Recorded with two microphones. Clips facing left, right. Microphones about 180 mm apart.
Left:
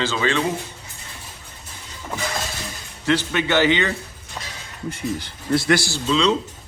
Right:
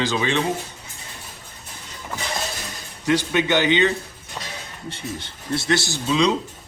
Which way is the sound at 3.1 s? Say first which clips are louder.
Right 1 dB; 15° right (ahead or behind).